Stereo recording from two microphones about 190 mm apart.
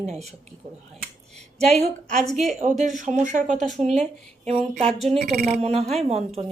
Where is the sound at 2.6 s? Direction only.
40° right (ahead or behind).